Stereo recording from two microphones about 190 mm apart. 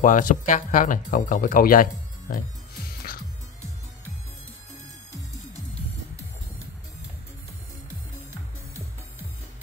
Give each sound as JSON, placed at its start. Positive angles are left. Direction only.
{"t": 0.0, "sound": "speech", "side_deg": 45}